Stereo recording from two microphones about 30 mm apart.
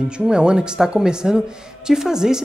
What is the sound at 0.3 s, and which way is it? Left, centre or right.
A man's voice, right.